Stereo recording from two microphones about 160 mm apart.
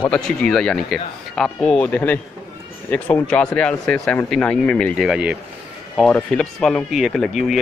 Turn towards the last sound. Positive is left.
turn(degrees=0)  # may be behind; listen again after turning